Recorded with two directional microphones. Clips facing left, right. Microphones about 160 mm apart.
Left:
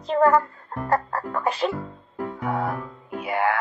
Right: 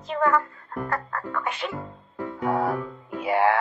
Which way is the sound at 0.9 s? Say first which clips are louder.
Left 8 dB; 35° left (ahead or behind).